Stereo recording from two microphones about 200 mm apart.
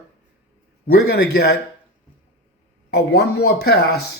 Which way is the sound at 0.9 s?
50° left (ahead or behind).